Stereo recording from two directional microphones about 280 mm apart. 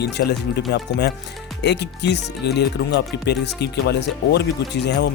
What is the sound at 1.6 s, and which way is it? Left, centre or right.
Speech, left.